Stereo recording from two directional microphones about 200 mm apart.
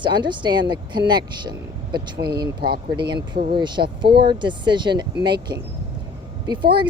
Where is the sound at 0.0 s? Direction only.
25° right (ahead or behind).